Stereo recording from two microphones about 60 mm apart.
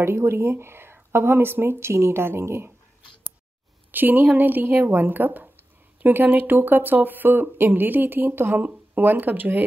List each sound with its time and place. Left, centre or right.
0.0 s speech: right
3.9 s speech: right